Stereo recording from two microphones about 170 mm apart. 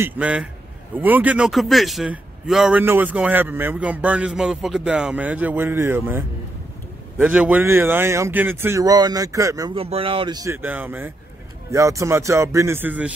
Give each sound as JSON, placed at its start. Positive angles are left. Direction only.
{"t": 0.0, "sound": "a man's voice", "side_deg": -10}
{"t": 9.8, "sound": "a man's voice", "side_deg": -35}